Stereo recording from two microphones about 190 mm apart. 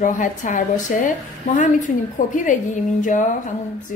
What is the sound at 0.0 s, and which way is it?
A woman's voice, 40° left (ahead or behind).